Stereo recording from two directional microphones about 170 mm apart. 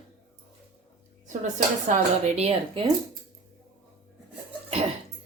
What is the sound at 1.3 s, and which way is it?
Speech, 45° right (ahead or behind).